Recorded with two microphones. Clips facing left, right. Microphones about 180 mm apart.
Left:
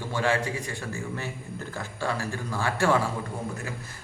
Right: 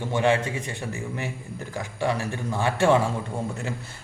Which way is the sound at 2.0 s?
20° right (ahead or behind).